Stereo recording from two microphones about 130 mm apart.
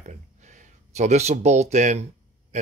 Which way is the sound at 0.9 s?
60° right (ahead or behind).